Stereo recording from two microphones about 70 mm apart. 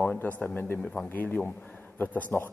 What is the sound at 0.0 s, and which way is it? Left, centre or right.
A man's voice, left.